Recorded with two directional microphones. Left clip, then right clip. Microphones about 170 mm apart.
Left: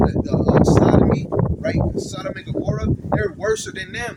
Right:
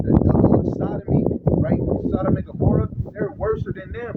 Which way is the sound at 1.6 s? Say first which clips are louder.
Even; 5° left (ahead or behind).